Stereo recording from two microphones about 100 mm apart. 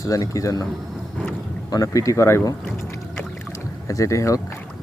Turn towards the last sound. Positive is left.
turn(degrees=35)  # may be behind; listen again after turning